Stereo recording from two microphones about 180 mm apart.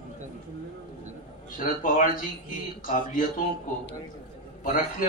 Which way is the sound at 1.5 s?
50° left (ahead or behind).